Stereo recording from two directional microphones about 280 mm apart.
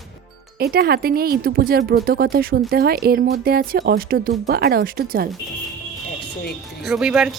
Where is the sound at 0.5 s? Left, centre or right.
Right.